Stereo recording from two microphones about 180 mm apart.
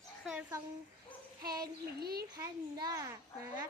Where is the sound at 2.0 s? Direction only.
60° right (ahead or behind).